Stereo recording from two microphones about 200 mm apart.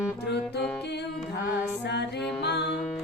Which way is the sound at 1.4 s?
60° left (ahead or behind).